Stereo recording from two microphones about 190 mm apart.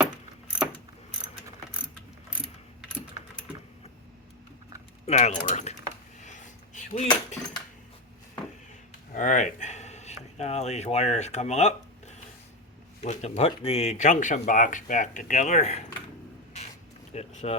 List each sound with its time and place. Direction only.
5.0 s speech: 35° left (ahead or behind)
6.2 s a sound: 40° left (ahead or behind)
9.1 s speech: 40° left (ahead or behind)
17.1 s speech: 35° left (ahead or behind)